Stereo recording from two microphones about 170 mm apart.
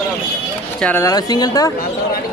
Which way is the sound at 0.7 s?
10° left (ahead or behind).